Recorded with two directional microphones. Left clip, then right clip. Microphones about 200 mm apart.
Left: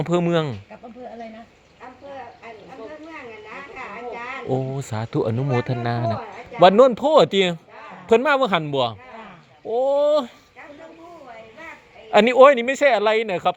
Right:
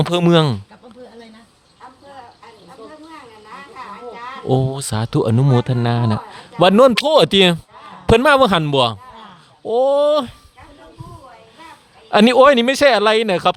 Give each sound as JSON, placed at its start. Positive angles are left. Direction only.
{"t": 0.1, "sound": "a man's voice", "side_deg": -40}
{"t": 4.4, "sound": "a man's voice", "side_deg": -45}
{"t": 12.1, "sound": "a man's voice", "side_deg": -35}